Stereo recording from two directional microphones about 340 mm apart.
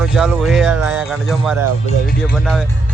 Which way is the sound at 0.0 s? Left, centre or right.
Centre.